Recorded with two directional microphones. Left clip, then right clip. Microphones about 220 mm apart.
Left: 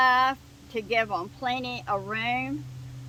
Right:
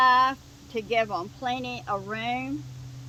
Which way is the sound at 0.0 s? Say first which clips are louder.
Right 1 dB; 20° right (ahead or behind).